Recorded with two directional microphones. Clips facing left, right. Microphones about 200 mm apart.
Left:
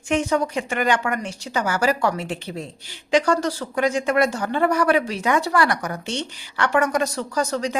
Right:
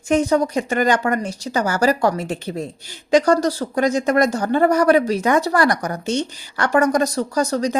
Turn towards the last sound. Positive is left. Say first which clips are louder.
# right 4 dB
turn(degrees=-40)  # may be behind; listen again after turning